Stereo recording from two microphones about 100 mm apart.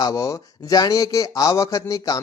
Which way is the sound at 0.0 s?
35° left (ahead or behind).